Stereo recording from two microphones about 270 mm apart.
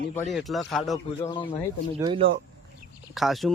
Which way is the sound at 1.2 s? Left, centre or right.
Centre.